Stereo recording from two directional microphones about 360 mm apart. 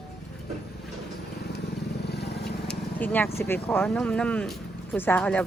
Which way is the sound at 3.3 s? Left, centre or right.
Centre.